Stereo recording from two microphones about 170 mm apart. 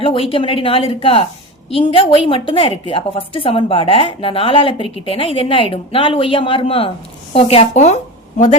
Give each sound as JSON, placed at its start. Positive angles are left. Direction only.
{"t": 0.0, "sound": "a woman's voice", "side_deg": 30}